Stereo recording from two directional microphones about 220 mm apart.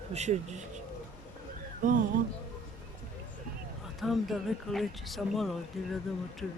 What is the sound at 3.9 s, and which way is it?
Speech, centre (ahead or behind).